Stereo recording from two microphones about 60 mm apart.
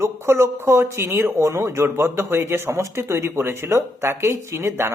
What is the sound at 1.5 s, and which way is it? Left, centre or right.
Speech, right.